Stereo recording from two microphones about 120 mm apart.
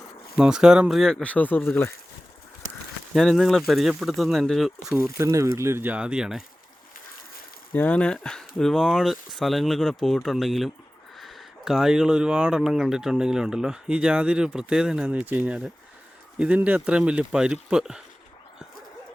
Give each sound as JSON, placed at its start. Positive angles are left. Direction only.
{"t": 0.3, "sound": "speech", "side_deg": -5}
{"t": 3.2, "sound": "speech", "side_deg": 0}
{"t": 4.9, "sound": "speech", "side_deg": -25}
{"t": 7.7, "sound": "speech", "side_deg": 10}